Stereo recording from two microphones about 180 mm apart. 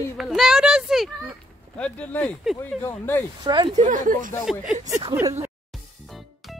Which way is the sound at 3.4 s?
25° right (ahead or behind).